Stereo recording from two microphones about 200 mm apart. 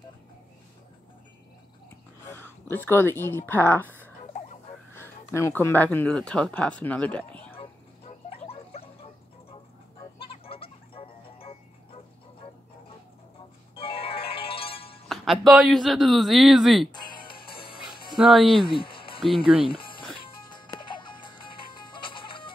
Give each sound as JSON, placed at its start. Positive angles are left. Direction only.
{"t": 2.2, "sound": "speech", "side_deg": 10}
{"t": 8.3, "sound": "a sound", "side_deg": 30}
{"t": 10.2, "sound": "music", "side_deg": 30}
{"t": 13.7, "sound": "music", "side_deg": 30}
{"t": 15.0, "sound": "a man's voice", "side_deg": 0}
{"t": 16.9, "sound": "music", "side_deg": 20}
{"t": 18.1, "sound": "speech", "side_deg": 0}
{"t": 18.5, "sound": "a sound", "side_deg": 25}
{"t": 19.6, "sound": "music", "side_deg": 25}